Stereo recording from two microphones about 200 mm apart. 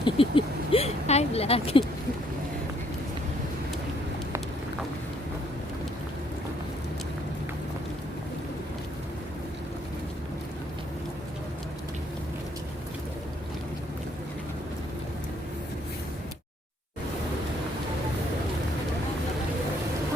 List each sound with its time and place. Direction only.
0.0 s speech: 25° left (ahead or behind)